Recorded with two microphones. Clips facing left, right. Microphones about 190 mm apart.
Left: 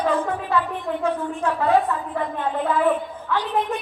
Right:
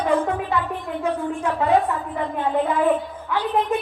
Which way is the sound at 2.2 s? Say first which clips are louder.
Right 4 dB; 15° right (ahead or behind).